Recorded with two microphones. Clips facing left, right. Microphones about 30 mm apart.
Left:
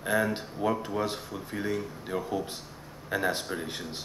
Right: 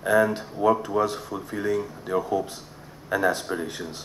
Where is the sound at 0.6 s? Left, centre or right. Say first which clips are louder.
Right 8 dB; left.